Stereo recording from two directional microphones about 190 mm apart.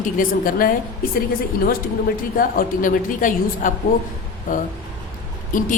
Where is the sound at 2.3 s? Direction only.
45° left (ahead or behind).